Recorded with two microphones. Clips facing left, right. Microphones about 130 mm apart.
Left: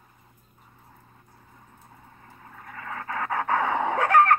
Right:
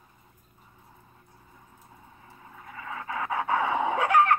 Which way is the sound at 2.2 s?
45° left (ahead or behind).